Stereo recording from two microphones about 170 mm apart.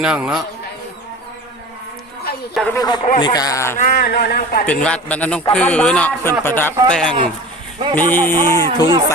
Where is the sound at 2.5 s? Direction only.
5° left (ahead or behind).